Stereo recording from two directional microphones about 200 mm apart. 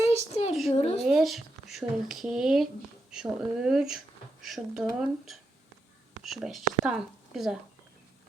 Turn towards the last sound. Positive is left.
turn(degrees=0)  # may be behind; listen again after turning